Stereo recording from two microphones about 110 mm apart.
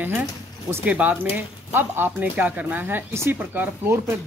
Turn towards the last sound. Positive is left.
turn(degrees=-25)  # may be behind; listen again after turning